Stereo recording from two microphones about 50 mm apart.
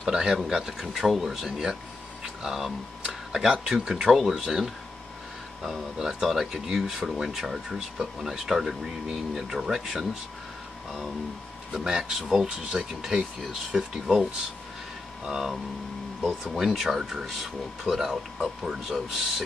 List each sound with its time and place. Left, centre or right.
0.0 s speech: centre
11.7 s speech: centre
15.2 s speech: centre